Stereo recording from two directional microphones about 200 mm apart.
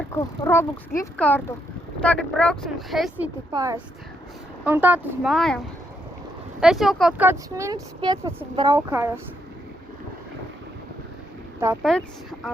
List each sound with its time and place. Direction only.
0.1 s speech: 15° left (ahead or behind)
3.5 s speech: 15° right (ahead or behind)
5.3 s speech: 5° left (ahead or behind)
6.6 s speech: centre (ahead or behind)
11.8 s speech: centre (ahead or behind)